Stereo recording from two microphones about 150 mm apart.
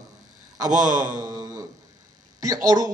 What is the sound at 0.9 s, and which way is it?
Speech, 60° right (ahead or behind).